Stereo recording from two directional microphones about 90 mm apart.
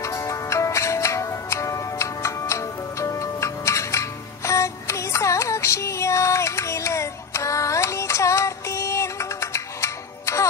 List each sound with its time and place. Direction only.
0.0 s music: 35° left (ahead or behind)